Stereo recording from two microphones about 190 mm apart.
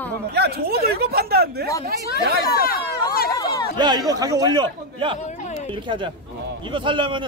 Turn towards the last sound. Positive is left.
turn(degrees=-25)  # may be behind; listen again after turning